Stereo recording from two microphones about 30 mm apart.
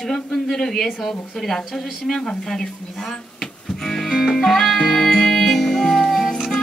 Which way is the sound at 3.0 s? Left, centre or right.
Centre.